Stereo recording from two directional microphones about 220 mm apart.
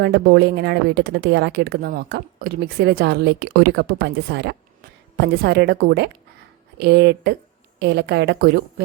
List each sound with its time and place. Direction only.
0.0 s speech: 50° right (ahead or behind)